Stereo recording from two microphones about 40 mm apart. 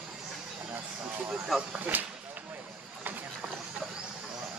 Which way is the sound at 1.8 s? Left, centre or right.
Right.